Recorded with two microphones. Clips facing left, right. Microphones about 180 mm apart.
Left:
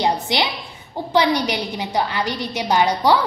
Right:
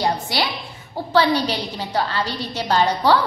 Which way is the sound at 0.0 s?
20° left (ahead or behind).